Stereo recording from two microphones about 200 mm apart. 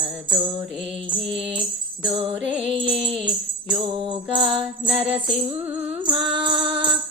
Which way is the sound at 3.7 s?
25° right (ahead or behind).